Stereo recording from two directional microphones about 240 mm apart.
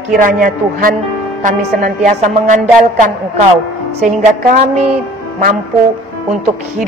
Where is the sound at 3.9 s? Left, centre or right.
Right.